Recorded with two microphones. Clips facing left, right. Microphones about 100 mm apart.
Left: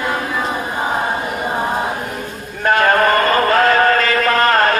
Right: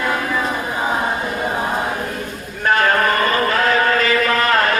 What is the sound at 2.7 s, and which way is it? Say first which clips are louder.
Chant: left 3 dB; 50° left (ahead or behind).